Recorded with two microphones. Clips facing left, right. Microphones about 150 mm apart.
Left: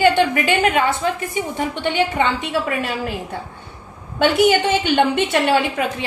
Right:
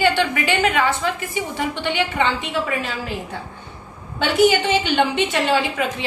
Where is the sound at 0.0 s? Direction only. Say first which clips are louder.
Left 4 dB; 50° left (ahead or behind).